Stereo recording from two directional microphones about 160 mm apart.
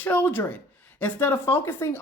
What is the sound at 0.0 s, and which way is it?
Speech, 10° left (ahead or behind).